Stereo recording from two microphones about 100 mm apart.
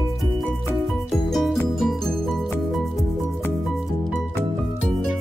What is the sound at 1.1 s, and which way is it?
Music, centre (ahead or behind).